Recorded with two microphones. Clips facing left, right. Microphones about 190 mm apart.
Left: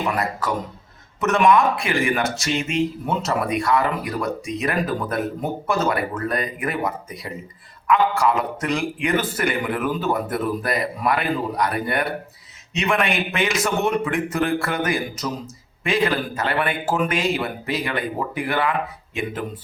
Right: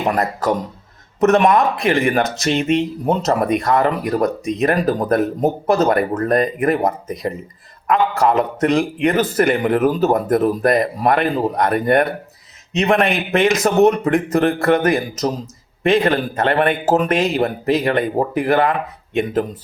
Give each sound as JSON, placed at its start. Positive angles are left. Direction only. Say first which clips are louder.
{"t": 0.0, "sound": "a man's voice", "louder": "right 5 dB", "side_deg": -40}